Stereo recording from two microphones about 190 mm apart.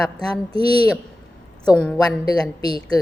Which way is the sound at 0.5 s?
30° right (ahead or behind).